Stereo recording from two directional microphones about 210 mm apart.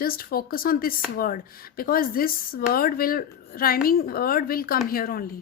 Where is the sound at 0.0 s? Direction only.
45° left (ahead or behind).